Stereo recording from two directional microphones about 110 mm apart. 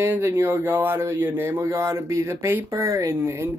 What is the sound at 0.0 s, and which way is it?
Speech, 20° right (ahead or behind).